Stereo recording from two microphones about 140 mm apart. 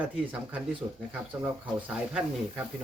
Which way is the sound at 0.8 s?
20° right (ahead or behind).